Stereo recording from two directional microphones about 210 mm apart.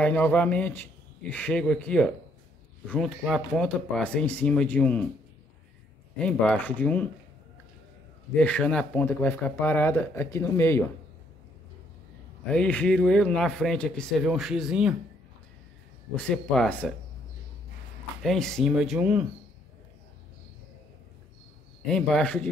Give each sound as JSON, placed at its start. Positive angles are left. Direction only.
{"t": 0.0, "sound": "speech", "side_deg": 5}
{"t": 6.1, "sound": "speech", "side_deg": 5}
{"t": 8.4, "sound": "speech", "side_deg": 5}
{"t": 12.4, "sound": "speech", "side_deg": 5}
{"t": 16.2, "sound": "speech", "side_deg": 5}
{"t": 18.2, "sound": "speech", "side_deg": 0}
{"t": 21.8, "sound": "speech", "side_deg": 5}